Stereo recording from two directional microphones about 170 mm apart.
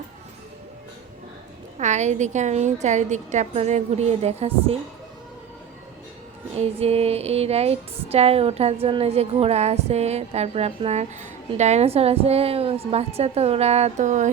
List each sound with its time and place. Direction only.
1.8 s a woman's voice: 45° right (ahead or behind)
6.6 s music: 35° right (ahead or behind)